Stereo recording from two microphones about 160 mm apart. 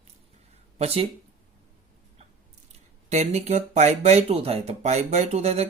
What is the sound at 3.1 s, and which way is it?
Speech, 45° right (ahead or behind).